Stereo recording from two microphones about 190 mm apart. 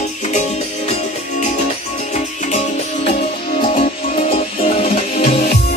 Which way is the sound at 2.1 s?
40° left (ahead or behind).